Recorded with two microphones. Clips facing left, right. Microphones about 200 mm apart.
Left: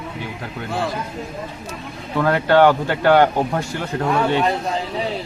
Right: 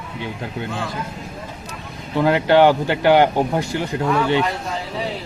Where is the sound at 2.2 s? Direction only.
15° right (ahead or behind).